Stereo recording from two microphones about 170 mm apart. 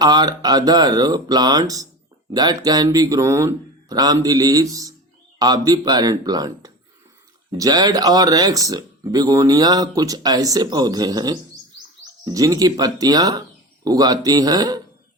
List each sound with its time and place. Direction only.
0.0 s speech: 25° right (ahead or behind)